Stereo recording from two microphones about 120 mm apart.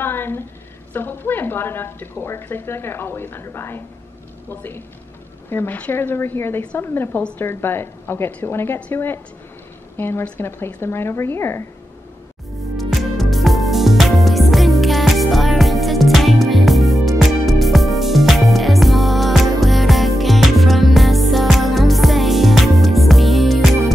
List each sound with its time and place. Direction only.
0.0 s a sound: 20° left (ahead or behind)
0.9 s a woman's voice: 20° left (ahead or behind)
12.7 s music: centre (ahead or behind)